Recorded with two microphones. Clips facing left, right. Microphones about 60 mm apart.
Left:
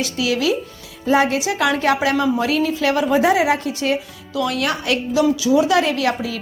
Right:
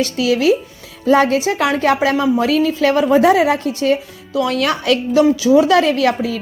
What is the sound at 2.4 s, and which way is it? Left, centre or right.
A woman's voice, right.